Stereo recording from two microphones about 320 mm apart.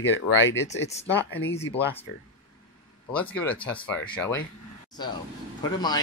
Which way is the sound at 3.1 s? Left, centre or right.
Centre.